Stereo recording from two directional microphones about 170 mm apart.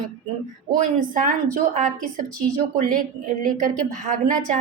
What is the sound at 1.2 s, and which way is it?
A woman's voice, 50° right (ahead or behind).